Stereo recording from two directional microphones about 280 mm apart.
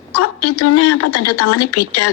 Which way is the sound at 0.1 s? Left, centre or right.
Left.